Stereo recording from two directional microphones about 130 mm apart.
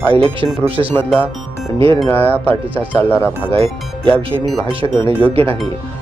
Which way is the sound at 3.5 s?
45° right (ahead or behind).